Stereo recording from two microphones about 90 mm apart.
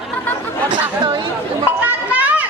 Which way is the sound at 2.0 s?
15° right (ahead or behind).